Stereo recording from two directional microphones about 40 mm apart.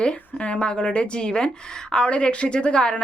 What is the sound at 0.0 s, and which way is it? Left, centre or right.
Speech, left.